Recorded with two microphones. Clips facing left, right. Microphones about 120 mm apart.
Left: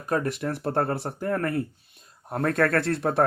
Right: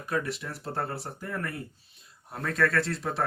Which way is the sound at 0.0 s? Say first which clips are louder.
Left 5 dB; 45° left (ahead or behind).